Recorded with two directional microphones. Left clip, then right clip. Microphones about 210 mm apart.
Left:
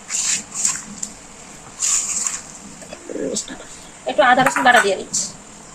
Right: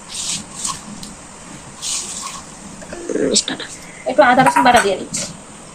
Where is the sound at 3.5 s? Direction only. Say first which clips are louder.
Right 10 dB; 5° right (ahead or behind).